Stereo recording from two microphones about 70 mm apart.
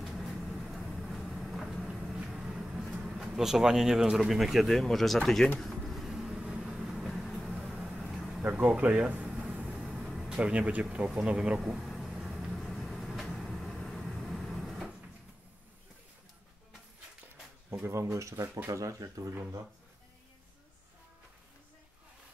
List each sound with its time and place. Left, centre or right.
0.0 s vehicle: centre
2.1 s speech: centre
5.6 s vehicle: centre
7.5 s vehicle: centre
8.4 s air conditioning: centre
9.9 s air conditioning: centre
10.4 s speech: centre
11.3 s a sound: centre
12.5 s vehicle: centre
17.8 s speech: right